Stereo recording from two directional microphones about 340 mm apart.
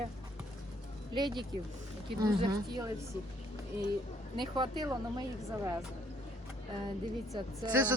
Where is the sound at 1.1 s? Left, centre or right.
Centre.